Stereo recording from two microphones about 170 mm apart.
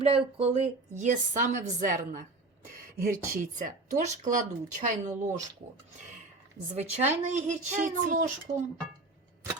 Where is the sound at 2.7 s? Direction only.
60° right (ahead or behind).